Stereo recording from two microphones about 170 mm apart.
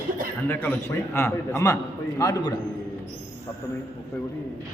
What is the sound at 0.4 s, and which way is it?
A man's voice, 10° left (ahead or behind).